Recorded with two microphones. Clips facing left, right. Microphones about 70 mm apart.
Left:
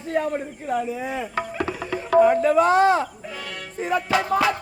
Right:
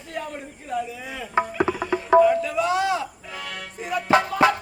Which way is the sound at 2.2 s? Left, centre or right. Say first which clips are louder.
Left 4 dB; left.